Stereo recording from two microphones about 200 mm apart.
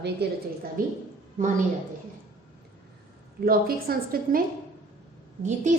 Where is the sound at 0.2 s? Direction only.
55° right (ahead or behind).